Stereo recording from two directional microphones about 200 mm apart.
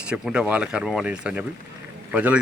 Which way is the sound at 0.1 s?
5° right (ahead or behind).